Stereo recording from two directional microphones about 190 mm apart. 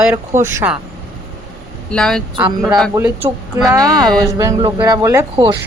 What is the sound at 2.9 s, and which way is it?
Speech, 15° right (ahead or behind).